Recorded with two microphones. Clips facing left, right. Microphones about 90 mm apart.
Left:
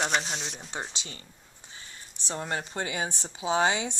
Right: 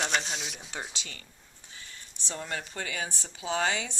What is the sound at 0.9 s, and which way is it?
Speech, 25° left (ahead or behind).